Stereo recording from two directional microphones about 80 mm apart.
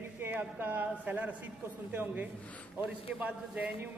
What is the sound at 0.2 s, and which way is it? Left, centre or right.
A man's voice, right.